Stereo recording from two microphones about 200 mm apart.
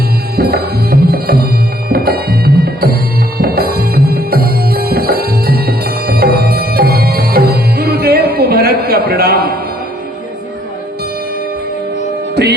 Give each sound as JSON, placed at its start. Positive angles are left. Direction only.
{"t": 0.3, "sound": "music", "side_deg": -50}